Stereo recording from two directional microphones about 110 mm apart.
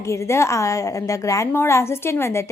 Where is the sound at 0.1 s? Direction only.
25° left (ahead or behind).